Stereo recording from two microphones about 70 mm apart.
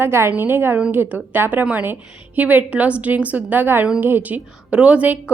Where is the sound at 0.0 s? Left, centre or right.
Right.